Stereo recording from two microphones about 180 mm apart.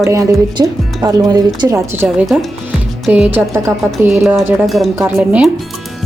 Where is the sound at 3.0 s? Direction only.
5° right (ahead or behind).